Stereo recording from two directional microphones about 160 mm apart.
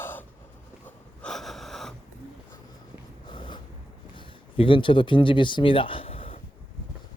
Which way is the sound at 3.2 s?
30° left (ahead or behind).